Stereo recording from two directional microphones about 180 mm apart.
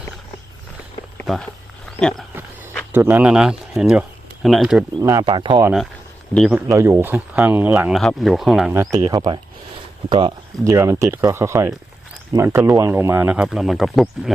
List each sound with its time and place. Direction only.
2.0 s speech: 5° left (ahead or behind)
2.9 s speech: 10° right (ahead or behind)
4.9 s speech: 20° right (ahead or behind)
6.3 s speech: centre (ahead or behind)
6.7 s speech: 15° right (ahead or behind)
8.7 s speech: 20° right (ahead or behind); by 14.3 s centre (ahead or behind)